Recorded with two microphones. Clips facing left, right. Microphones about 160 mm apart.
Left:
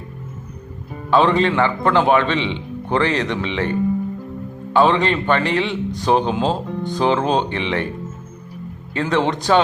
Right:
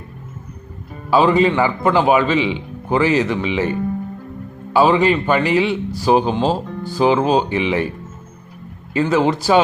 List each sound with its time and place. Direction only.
1.1 s a man's voice: 5° right (ahead or behind)